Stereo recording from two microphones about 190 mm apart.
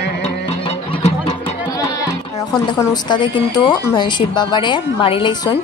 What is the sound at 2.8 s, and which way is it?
Speech, 20° left (ahead or behind).